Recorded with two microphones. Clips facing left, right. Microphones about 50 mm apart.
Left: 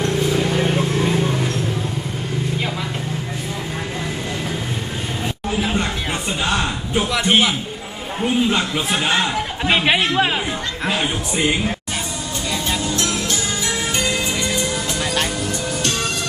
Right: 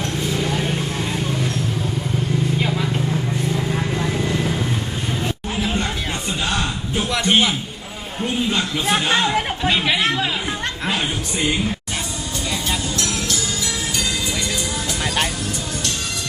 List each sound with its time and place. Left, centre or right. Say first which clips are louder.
0.0 s vehicle: left 4 dB; centre
5.6 s chatter: even; centre
6.4 s a sound: left 3 dB; centre
7.1 s a man's voice: even; centre
9.6 s speech: left 4 dB; left
11.3 s a man's voice: left 2 dB; centre
13.0 s music: left 2 dB; left